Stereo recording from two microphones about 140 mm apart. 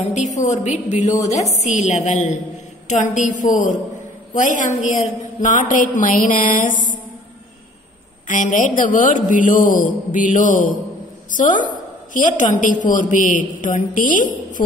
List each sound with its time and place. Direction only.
0.0 s a woman's voice: 60° left (ahead or behind)
8.3 s a woman's voice: 70° left (ahead or behind)